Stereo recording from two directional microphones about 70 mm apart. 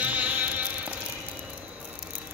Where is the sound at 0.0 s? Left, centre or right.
Right.